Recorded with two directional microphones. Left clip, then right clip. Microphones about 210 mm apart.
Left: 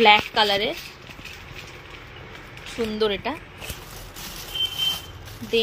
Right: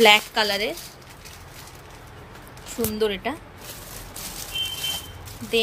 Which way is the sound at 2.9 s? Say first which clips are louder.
Left 1 dB; 5° right (ahead or behind).